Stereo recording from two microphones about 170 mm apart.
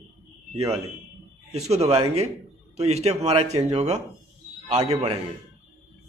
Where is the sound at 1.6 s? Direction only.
40° right (ahead or behind).